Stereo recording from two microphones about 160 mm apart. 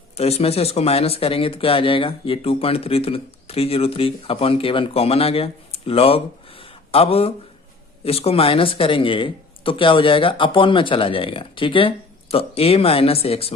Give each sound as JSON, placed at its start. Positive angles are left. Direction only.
{"t": 0.2, "sound": "speech", "side_deg": 40}